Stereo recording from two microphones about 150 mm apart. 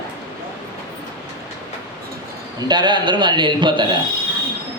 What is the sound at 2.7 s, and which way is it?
A man's voice, 30° right (ahead or behind).